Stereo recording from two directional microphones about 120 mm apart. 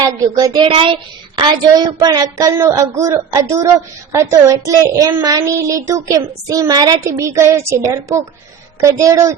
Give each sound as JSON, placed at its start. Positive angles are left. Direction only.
{"t": 0.0, "sound": "speech", "side_deg": -30}
{"t": 0.6, "sound": "a child's voice", "side_deg": -50}
{"t": 2.0, "sound": "speech", "side_deg": -35}